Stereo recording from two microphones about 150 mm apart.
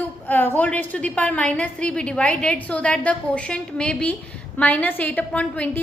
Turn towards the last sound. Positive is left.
turn(degrees=10)  # may be behind; listen again after turning